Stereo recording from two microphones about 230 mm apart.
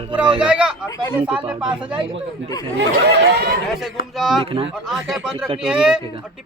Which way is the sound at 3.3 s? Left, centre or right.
Right.